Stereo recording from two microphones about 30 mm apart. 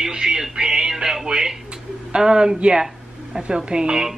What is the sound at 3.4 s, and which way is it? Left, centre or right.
Speech, right.